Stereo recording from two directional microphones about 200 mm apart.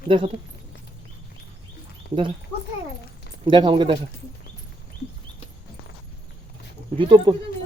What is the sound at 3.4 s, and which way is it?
Speech, 25° right (ahead or behind).